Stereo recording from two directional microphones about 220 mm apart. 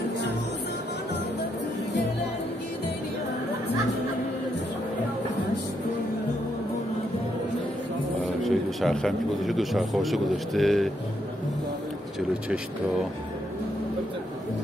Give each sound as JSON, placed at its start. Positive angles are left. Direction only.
{"t": 8.4, "sound": "speech", "side_deg": 0}